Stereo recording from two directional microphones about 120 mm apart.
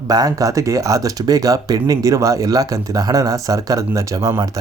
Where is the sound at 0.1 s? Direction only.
30° right (ahead or behind).